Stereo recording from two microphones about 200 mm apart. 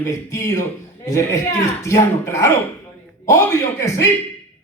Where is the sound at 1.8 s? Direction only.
15° left (ahead or behind).